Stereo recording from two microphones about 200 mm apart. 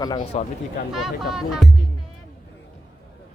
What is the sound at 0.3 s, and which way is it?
Speech, 30° left (ahead or behind).